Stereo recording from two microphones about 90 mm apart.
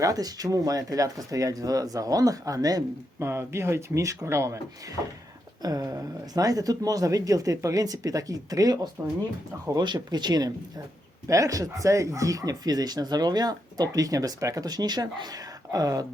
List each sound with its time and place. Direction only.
0.0 s speech: 45° right (ahead or behind)
3.2 s speech: 30° right (ahead or behind); by 10.5 s 50° right (ahead or behind)
11.3 s speech: 40° right (ahead or behind)